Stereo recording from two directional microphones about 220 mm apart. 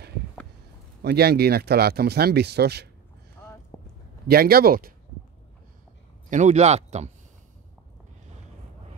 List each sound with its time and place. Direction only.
1.0 s speech: 45° right (ahead or behind)
3.7 s a sound: 15° left (ahead or behind)
4.3 s speech: 45° right (ahead or behind)
6.3 s speech: 30° right (ahead or behind)